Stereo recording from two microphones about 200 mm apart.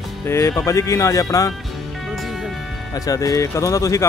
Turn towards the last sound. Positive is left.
turn(degrees=15)  # may be behind; listen again after turning